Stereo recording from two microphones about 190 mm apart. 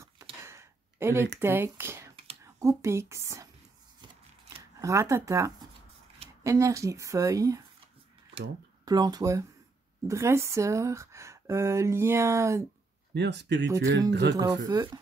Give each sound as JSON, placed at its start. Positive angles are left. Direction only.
{"t": 0.0, "sound": "a sound", "side_deg": -15}
{"t": 1.4, "sound": "a woman's voice", "side_deg": -10}
{"t": 4.8, "sound": "speech", "side_deg": -15}
{"t": 13.1, "sound": "speech", "side_deg": -65}
{"t": 14.4, "sound": "speech", "side_deg": -20}